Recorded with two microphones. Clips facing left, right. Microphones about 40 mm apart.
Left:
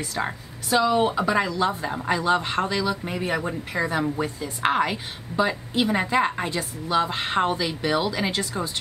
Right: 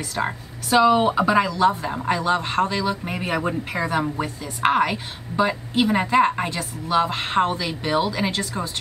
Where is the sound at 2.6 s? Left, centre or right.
Centre.